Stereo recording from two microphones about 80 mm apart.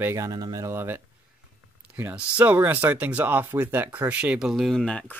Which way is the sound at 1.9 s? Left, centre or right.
Right.